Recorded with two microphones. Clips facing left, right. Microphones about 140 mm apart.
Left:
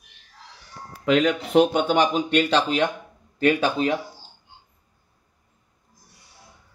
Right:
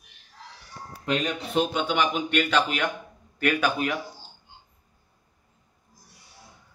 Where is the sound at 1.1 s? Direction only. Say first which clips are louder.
Left 8 dB; 85° left.